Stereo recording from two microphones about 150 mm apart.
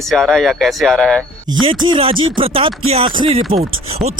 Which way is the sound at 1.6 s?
35° right (ahead or behind).